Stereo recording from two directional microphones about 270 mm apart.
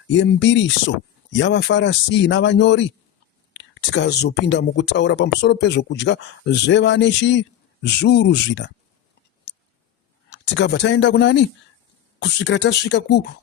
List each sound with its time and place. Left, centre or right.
0.1 s speech: left
10.2 s speech: left